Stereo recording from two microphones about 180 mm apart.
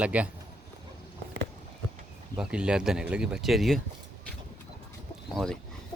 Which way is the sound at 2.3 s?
5° right (ahead or behind).